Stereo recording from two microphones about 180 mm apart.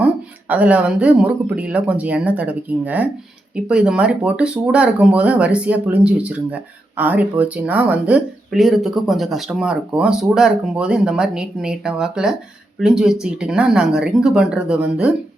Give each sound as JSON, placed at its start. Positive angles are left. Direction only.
{"t": 0.0, "sound": "speech", "side_deg": -10}